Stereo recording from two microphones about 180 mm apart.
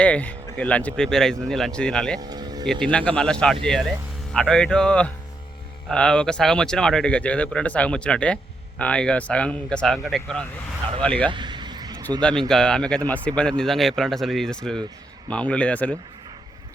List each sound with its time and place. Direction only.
0.0 s speech: 5° left (ahead or behind)
2.1 s music: 20° right (ahead or behind)
2.8 s speech: 5° left (ahead or behind)
11.3 s a sound: 25° right (ahead or behind)
12.5 s speech: 5° left (ahead or behind)